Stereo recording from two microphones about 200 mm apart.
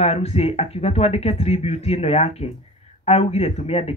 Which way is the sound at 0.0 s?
30° left (ahead or behind).